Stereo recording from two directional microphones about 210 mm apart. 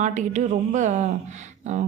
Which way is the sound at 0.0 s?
35° right (ahead or behind).